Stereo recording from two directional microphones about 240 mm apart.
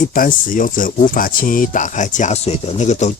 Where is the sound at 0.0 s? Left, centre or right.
Left.